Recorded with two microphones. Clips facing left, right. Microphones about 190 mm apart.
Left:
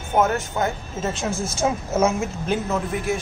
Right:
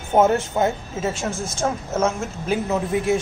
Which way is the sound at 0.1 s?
30° right (ahead or behind).